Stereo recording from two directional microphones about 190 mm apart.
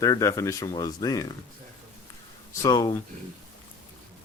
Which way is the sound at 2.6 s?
20° left (ahead or behind).